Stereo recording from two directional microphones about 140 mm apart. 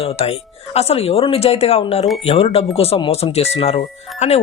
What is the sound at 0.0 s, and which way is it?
Speech, 45° left (ahead or behind).